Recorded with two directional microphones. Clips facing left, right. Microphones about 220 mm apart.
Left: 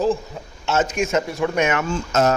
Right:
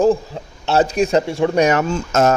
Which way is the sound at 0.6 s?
35° right (ahead or behind).